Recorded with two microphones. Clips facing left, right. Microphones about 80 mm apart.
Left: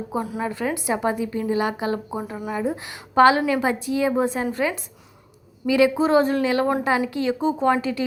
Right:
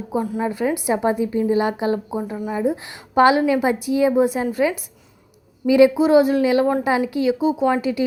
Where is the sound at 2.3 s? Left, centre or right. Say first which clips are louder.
Right 3 dB; centre.